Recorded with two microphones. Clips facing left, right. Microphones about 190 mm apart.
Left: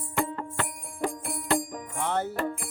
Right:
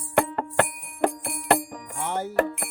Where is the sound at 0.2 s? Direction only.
65° right (ahead or behind).